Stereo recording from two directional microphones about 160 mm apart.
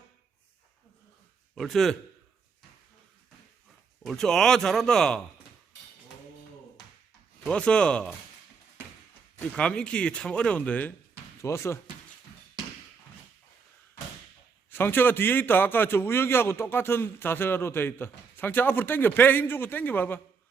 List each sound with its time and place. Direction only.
1.5 s speech: centre (ahead or behind)
4.0 s speech: centre (ahead or behind)
7.4 s speech: 5° left (ahead or behind)
9.6 s a man's voice: 5° left (ahead or behind)
14.7 s a man's voice: 15° left (ahead or behind)